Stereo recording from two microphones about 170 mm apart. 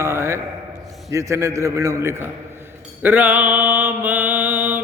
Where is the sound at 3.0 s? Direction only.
10° right (ahead or behind).